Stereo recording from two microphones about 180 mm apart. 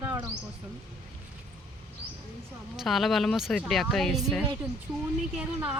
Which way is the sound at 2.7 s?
Centre (ahead or behind).